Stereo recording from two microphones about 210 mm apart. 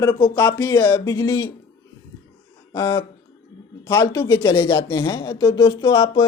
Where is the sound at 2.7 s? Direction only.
20° left (ahead or behind).